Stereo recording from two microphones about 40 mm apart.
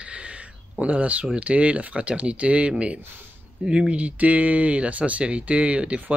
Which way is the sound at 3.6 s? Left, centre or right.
Right.